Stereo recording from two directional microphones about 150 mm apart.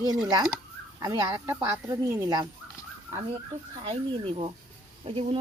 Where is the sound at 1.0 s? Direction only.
20° right (ahead or behind).